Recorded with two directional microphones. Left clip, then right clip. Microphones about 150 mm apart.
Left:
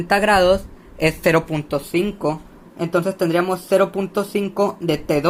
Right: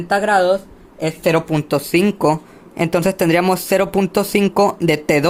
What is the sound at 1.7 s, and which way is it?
Speech, 60° right (ahead or behind).